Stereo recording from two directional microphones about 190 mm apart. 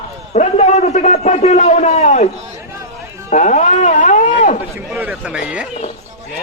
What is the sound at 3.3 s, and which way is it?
Speech, 40° left (ahead or behind).